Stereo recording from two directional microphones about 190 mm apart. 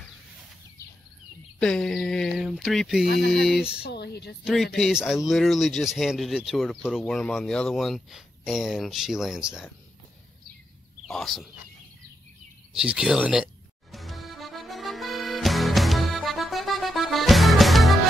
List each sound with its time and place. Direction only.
1.6 s speech: 5° left (ahead or behind)
3.1 s speech: 60° left (ahead or behind)
3.4 s speech: centre (ahead or behind)
3.8 s speech: 60° left (ahead or behind)
4.7 s speech: centre (ahead or behind)
11.1 s speech: centre (ahead or behind)
12.7 s speech: 5° right (ahead or behind)
13.9 s music: centre (ahead or behind)